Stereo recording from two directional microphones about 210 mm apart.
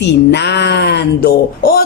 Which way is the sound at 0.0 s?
55° left (ahead or behind).